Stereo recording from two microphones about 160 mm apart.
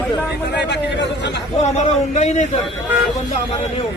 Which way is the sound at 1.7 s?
45° left (ahead or behind).